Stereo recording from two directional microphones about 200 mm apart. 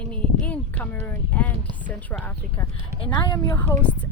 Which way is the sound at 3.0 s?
25° left (ahead or behind).